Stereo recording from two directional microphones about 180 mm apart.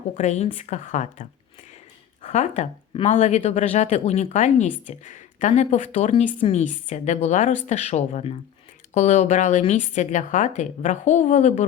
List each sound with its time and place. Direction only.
0.2 s a woman's voice: 40° left (ahead or behind)